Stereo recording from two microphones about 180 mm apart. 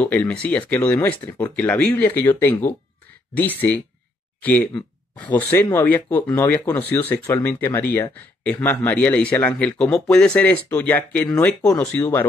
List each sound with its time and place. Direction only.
0.0 s speech: 10° left (ahead or behind)